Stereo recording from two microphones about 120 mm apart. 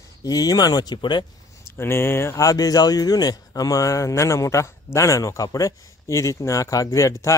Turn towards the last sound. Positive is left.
turn(degrees=25)  # may be behind; listen again after turning